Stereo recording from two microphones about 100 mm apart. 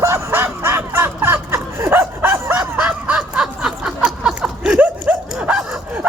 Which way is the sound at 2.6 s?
10° right (ahead or behind).